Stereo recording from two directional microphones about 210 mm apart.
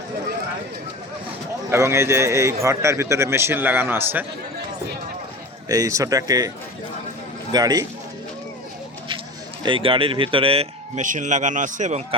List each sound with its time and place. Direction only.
1.7 s a man's voice: 10° right (ahead or behind)
5.6 s a man's voice: 15° right (ahead or behind)
7.5 s a man's voice: 20° right (ahead or behind)
9.6 s speech: 25° right (ahead or behind)